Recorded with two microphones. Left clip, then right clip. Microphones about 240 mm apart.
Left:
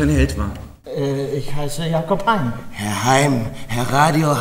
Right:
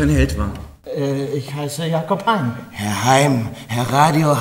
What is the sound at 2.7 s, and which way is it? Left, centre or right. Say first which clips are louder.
Speech: right 1 dB; centre.